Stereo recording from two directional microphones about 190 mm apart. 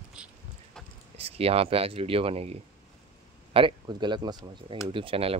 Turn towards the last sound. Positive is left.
turn(degrees=-30)  # may be behind; listen again after turning